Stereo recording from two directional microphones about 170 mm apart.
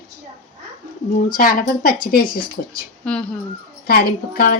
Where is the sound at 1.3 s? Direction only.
55° left (ahead or behind).